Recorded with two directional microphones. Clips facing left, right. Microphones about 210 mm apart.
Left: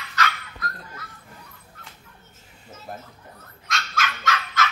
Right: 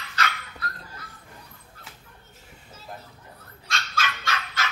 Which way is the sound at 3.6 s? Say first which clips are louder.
Left 2 dB; 30° right (ahead or behind).